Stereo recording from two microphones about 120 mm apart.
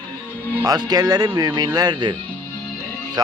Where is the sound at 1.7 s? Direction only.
35° right (ahead or behind).